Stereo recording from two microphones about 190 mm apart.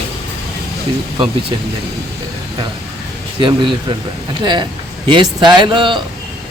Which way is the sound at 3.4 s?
25° right (ahead or behind).